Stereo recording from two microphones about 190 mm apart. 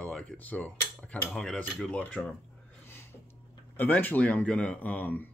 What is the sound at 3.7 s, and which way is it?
Speech, 10° left (ahead or behind).